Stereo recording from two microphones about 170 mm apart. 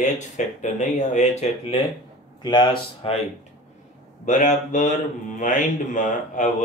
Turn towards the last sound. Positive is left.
turn(degrees=45)  # may be behind; listen again after turning